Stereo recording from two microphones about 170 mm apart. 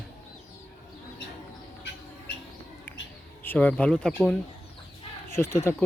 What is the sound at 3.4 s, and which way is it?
Speech, 10° left (ahead or behind).